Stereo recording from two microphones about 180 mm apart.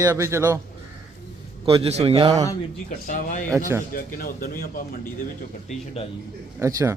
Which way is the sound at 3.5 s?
20° right (ahead or behind).